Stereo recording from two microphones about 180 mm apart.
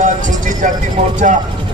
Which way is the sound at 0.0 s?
45° right (ahead or behind).